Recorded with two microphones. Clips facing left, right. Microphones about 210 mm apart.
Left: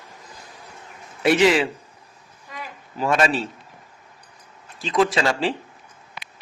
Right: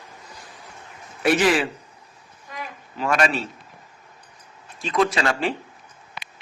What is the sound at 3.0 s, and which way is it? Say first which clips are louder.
Speech: left 1 dB; 30° left (ahead or behind).